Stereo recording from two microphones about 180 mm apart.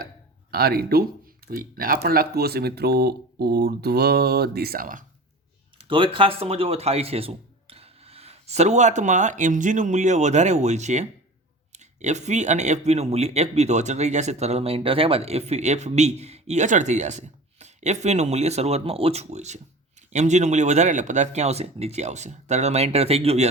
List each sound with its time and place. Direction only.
0.5 s speech: 60° right (ahead or behind)
5.9 s speech: 30° right (ahead or behind)